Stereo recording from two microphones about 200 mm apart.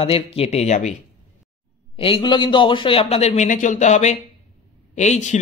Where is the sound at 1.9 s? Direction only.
25° left (ahead or behind).